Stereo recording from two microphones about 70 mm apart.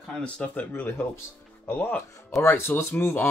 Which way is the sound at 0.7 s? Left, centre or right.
Left.